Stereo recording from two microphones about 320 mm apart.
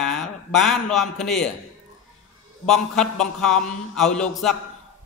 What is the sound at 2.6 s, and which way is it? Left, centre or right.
A man's voice, centre.